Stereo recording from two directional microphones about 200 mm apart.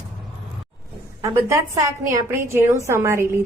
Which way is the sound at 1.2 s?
15° right (ahead or behind).